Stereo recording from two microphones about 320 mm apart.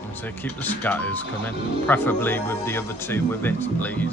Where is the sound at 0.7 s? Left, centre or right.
Centre.